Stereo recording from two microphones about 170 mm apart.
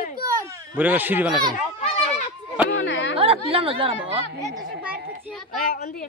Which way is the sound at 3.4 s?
35° right (ahead or behind).